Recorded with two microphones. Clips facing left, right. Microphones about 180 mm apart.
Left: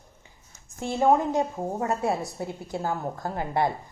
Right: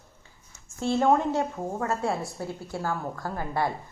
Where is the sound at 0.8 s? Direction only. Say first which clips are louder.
Left 1 dB; 15° left (ahead or behind).